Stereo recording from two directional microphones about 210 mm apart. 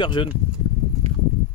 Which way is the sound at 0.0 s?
20° left (ahead or behind).